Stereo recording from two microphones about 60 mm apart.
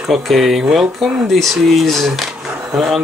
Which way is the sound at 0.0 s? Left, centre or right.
Centre.